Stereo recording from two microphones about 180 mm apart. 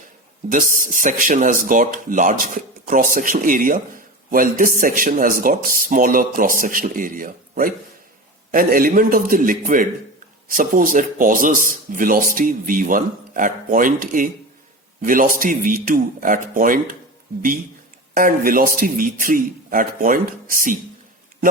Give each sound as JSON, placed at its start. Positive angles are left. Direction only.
{"t": 0.4, "sound": "speech", "side_deg": -45}
{"t": 18.1, "sound": "speech", "side_deg": -50}